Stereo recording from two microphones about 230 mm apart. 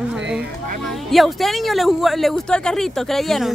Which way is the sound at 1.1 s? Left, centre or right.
Centre.